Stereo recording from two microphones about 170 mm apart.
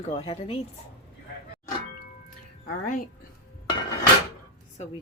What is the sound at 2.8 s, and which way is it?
Speech, 50° left (ahead or behind).